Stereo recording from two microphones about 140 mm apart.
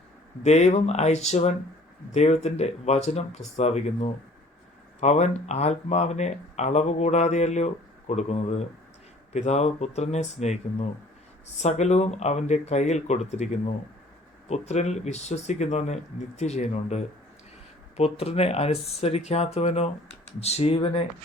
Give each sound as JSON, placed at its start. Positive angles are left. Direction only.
{"t": 0.4, "sound": "speech", "side_deg": 50}